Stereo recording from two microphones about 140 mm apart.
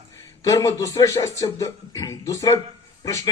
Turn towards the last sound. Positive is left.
turn(degrees=25)  # may be behind; listen again after turning